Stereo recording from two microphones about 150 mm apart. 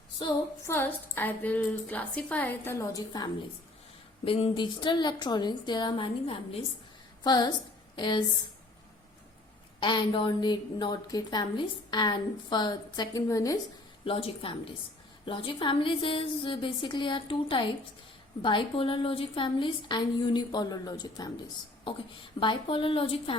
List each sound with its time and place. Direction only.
0.6 s a woman's voice: 15° left (ahead or behind)
4.3 s a woman's voice: 35° left (ahead or behind)
7.3 s a woman's voice: 25° left (ahead or behind)
9.8 s a woman's voice: 30° left (ahead or behind)
14.0 s a woman's voice: 35° left (ahead or behind)